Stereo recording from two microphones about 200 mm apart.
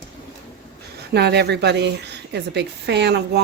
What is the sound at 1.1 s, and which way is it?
A woman's voice, 55° right (ahead or behind).